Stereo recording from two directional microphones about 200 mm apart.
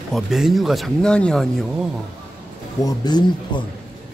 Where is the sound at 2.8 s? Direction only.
20° left (ahead or behind).